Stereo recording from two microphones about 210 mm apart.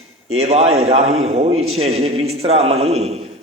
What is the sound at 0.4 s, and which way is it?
A man's voice, 30° right (ahead or behind).